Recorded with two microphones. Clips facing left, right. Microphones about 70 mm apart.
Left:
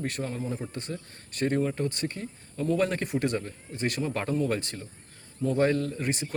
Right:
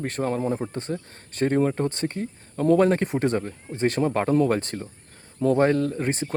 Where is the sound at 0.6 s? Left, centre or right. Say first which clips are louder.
Right 6 dB; right.